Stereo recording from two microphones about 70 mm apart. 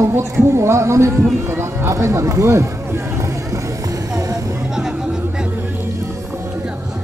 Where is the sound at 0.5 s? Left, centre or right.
Right.